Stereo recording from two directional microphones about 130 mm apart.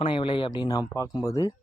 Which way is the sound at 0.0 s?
40° left (ahead or behind).